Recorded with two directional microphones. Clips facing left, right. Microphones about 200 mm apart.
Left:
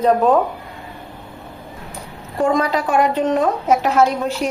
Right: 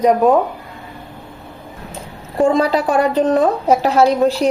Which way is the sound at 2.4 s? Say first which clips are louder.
Right 4 dB; 30° right (ahead or behind).